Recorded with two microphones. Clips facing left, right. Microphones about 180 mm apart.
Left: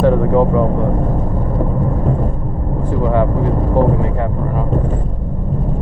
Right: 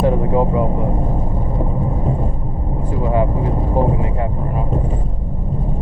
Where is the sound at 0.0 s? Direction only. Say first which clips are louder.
Left 4 dB; 15° right (ahead or behind).